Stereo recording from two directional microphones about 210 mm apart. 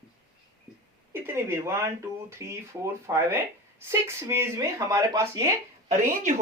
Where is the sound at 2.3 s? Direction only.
15° right (ahead or behind).